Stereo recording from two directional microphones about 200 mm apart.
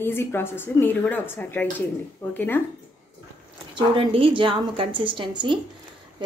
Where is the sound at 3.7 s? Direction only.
25° right (ahead or behind).